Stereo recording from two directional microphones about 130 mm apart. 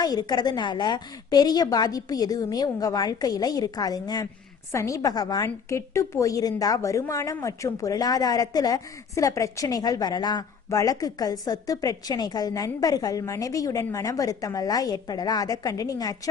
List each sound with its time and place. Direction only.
0.0 s a woman's voice: 30° left (ahead or behind)